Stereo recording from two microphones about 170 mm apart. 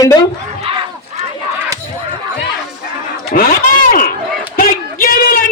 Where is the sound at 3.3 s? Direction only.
55° left (ahead or behind).